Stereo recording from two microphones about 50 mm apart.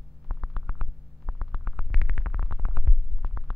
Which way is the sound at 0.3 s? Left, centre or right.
Centre.